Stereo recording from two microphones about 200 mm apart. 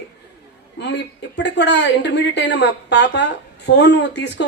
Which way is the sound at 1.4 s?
60° left (ahead or behind).